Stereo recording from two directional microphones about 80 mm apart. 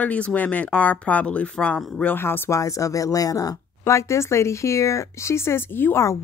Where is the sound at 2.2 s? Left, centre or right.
Left.